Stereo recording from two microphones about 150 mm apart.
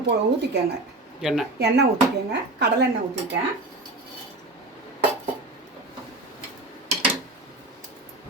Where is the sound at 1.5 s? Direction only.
90° right.